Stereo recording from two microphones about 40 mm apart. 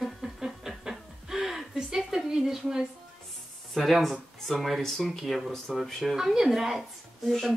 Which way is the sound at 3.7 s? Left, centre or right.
Centre.